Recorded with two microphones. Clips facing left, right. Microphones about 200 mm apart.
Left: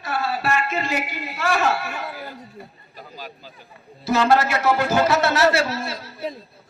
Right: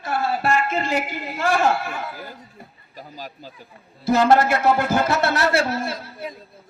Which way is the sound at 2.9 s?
40° right (ahead or behind).